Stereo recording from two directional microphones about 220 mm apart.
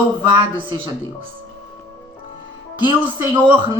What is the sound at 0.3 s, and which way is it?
Speech, 20° right (ahead or behind).